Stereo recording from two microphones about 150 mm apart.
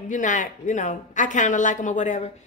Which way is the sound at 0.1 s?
55° left (ahead or behind).